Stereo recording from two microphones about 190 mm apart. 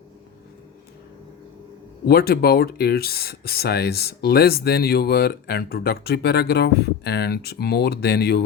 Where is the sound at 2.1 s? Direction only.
55° left (ahead or behind).